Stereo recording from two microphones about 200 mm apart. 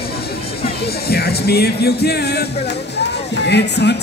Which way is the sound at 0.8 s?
55° left (ahead or behind).